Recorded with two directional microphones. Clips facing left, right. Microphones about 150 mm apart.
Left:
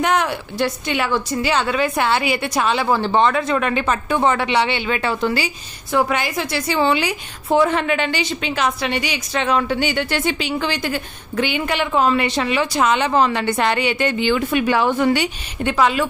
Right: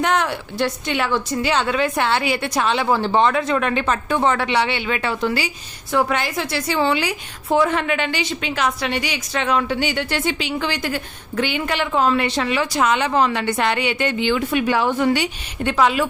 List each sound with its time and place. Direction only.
0.0 s a woman's voice: 15° left (ahead or behind); by 5.5 s 35° left (ahead or behind)
5.9 s a woman's voice: 15° left (ahead or behind); by 9.6 s 30° left (ahead or behind)
9.6 s speech: 55° left (ahead or behind)
10.6 s a woman's voice: 25° left (ahead or behind); by 15.3 s 60° left (ahead or behind)
15.8 s speech: 5° right (ahead or behind)